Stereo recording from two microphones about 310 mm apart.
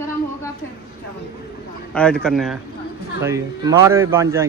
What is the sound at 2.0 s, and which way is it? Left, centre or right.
A man's voice, centre.